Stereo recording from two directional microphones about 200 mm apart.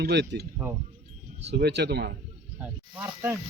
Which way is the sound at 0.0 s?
55° right (ahead or behind).